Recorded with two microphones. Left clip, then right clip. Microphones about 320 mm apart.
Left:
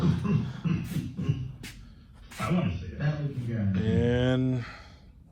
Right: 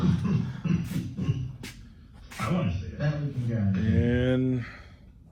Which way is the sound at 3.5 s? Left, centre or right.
Centre.